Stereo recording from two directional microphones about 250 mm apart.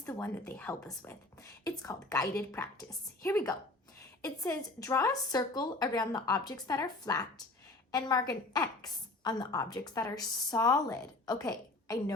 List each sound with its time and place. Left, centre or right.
0.0 s a woman's voice: centre